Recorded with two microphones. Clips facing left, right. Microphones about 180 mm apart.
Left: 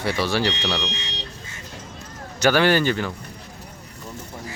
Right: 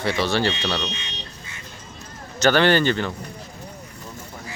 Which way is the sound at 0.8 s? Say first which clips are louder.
Left 1 dB; 90° left.